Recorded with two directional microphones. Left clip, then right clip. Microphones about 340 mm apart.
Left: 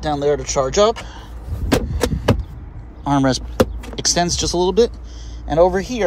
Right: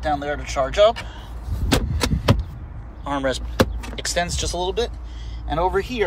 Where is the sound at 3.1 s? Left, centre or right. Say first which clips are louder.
Left 6 dB; centre.